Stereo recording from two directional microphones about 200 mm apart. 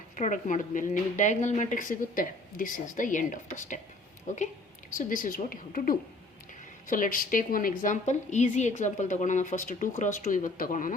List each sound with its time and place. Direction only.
0.2 s a woman's voice: 40° left (ahead or behind)